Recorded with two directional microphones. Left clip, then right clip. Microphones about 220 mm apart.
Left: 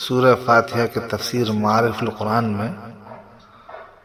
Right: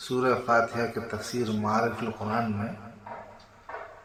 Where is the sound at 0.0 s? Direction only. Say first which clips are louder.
Left 10 dB; 35° left (ahead or behind).